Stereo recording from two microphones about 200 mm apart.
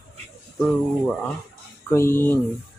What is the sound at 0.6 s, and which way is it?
Speech, 5° left (ahead or behind).